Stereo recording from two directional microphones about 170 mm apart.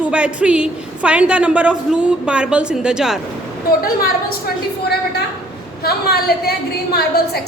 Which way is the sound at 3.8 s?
60° left (ahead or behind).